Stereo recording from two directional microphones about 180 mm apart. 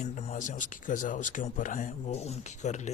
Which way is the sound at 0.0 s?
40° left (ahead or behind).